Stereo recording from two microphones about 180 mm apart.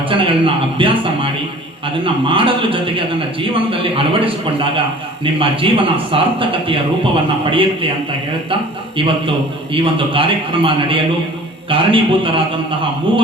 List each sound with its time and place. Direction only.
0.1 s a man's voice: 30° right (ahead or behind)
9.0 s a man's voice: 30° right (ahead or behind)